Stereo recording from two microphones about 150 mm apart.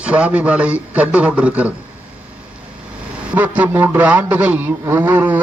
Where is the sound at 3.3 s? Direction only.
10° right (ahead or behind).